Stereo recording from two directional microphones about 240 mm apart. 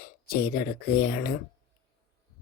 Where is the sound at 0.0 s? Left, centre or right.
Left.